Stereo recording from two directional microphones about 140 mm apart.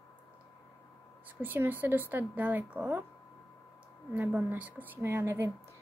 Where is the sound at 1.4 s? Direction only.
15° right (ahead or behind).